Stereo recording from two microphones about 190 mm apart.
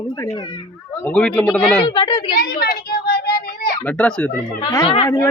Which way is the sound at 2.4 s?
55° left (ahead or behind).